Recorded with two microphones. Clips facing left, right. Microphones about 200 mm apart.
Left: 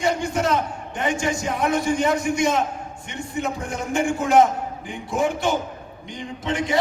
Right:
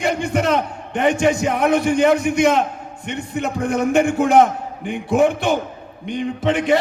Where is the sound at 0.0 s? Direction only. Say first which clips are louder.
Right 3 dB; 60° right (ahead or behind).